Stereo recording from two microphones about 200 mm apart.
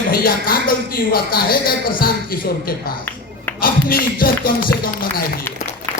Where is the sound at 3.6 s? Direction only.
45° left (ahead or behind).